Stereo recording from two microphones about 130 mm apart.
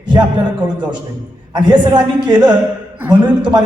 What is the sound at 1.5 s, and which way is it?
Speech, 35° right (ahead or behind).